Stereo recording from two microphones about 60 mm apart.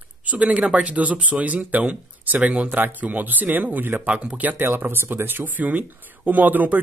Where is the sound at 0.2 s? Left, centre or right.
Right.